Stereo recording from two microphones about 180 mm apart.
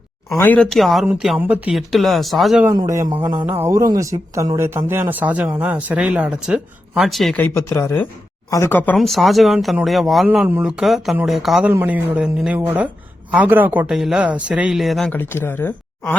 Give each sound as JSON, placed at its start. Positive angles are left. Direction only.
{"t": 0.3, "sound": "speech", "side_deg": 10}
{"t": 2.6, "sound": "speech", "side_deg": -15}
{"t": 3.2, "sound": "a sound", "side_deg": -20}
{"t": 3.6, "sound": "speech", "side_deg": -15}
{"t": 9.0, "sound": "speech", "side_deg": 0}
{"t": 11.7, "sound": "speech", "side_deg": -10}